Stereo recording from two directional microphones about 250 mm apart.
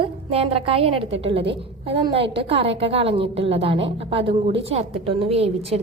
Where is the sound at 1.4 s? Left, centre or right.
Right.